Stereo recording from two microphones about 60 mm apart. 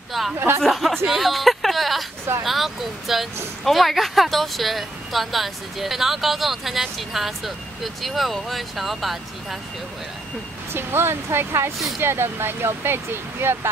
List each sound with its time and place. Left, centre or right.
0.2 s speech: centre
10.7 s speech: right